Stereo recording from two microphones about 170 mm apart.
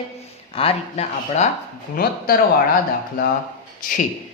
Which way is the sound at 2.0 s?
60° left (ahead or behind).